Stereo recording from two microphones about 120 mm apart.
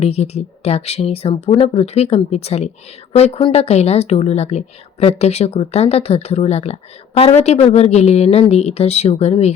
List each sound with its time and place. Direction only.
0.0 s speech: 60° left (ahead or behind)